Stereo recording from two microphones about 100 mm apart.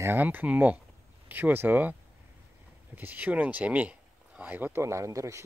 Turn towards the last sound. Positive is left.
turn(degrees=-35)  # may be behind; listen again after turning